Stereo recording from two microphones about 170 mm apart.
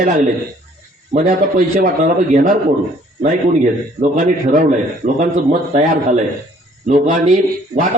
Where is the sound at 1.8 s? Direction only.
50° right (ahead or behind).